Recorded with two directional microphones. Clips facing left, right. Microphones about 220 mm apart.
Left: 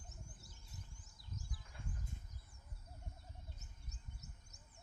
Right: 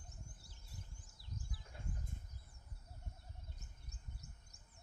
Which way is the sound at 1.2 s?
30° right (ahead or behind).